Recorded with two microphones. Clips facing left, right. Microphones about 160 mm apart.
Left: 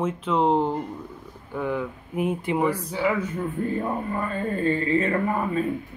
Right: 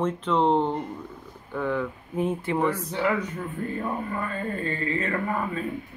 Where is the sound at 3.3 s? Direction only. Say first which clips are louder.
Left 4 dB; 20° left (ahead or behind).